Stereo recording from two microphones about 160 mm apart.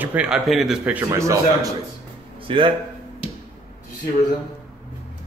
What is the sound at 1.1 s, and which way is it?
Speech, 20° right (ahead or behind).